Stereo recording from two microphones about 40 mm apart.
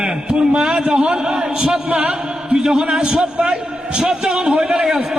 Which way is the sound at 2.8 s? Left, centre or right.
Right.